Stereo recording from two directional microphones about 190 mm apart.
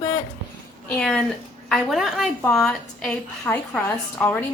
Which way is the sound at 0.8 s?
5° left (ahead or behind).